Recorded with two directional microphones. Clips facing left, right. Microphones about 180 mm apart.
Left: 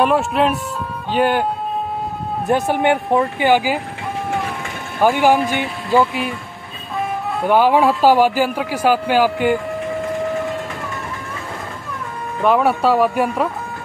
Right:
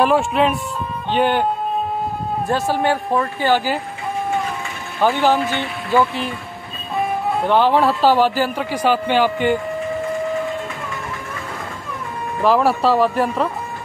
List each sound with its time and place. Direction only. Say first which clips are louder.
0.0 s speech: even; centre (ahead or behind)
2.4 s speech: left 3 dB; 20° left (ahead or behind)
5.0 s speech: left 2 dB; 10° left (ahead or behind)
7.4 s speech: left 2 dB; 10° left (ahead or behind)
12.4 s speech: even; centre (ahead or behind)